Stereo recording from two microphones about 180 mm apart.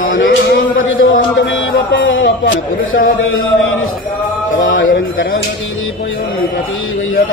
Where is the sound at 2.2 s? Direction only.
80° left.